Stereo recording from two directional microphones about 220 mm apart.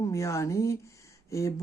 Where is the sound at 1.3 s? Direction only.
15° left (ahead or behind).